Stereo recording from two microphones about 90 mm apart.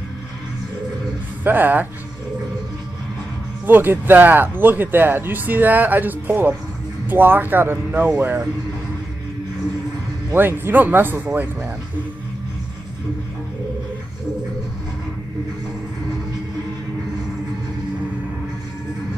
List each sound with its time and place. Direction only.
1.4 s speech: 20° right (ahead or behind)
3.6 s speech: 20° right (ahead or behind)
10.3 s speech: 25° right (ahead or behind)